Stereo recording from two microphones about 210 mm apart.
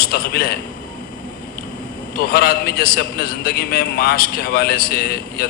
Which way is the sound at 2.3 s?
50° left (ahead or behind).